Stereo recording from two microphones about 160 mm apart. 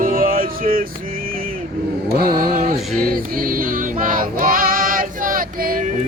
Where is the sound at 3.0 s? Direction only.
65° right (ahead or behind).